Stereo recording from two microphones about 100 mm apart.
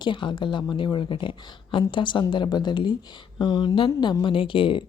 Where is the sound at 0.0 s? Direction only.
50° left (ahead or behind).